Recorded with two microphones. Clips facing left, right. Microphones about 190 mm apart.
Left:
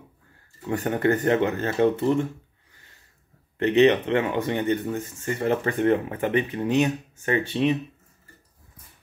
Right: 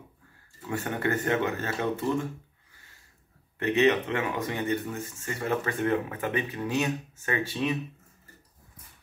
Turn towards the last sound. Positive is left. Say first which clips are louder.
# left 6 dB
turn(degrees=30)  # may be behind; listen again after turning